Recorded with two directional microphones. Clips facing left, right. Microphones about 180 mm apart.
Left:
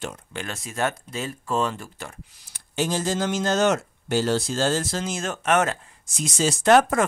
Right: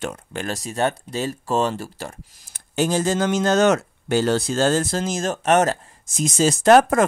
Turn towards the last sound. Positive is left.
turn(degrees=-45)  # may be behind; listen again after turning